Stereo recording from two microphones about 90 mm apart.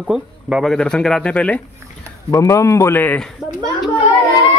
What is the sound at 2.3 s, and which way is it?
Speech, 35° left (ahead or behind).